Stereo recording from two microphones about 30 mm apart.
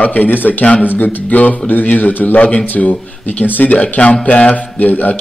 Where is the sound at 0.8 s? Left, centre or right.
Left.